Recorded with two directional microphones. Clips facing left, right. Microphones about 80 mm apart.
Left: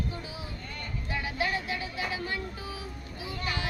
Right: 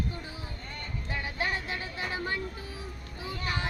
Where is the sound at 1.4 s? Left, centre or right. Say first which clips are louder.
Left 2 dB; right.